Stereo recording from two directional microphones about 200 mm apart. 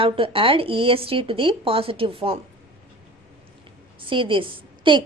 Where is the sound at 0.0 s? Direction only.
25° right (ahead or behind).